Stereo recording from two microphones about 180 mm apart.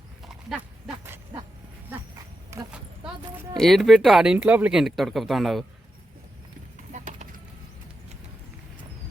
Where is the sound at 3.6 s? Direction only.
Centre (ahead or behind).